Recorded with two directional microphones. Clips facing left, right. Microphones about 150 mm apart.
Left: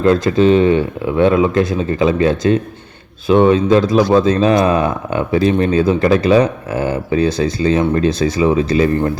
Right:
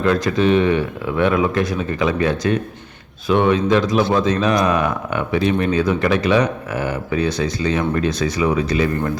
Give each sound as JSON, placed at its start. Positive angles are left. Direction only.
{"t": 0.0, "sound": "speech", "side_deg": 30}